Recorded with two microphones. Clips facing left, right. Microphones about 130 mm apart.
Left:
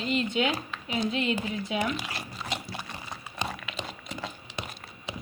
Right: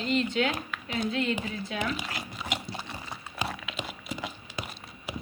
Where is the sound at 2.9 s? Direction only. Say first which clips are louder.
Even; 5° right (ahead or behind).